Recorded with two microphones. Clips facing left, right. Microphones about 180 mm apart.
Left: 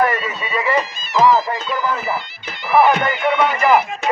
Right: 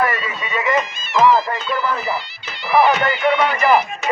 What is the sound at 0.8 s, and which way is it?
Music, 35° left (ahead or behind).